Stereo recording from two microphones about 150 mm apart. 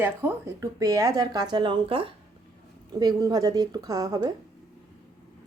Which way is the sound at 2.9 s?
25° right (ahead or behind).